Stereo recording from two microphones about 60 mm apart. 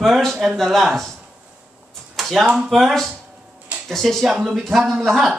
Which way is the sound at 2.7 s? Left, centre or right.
Centre.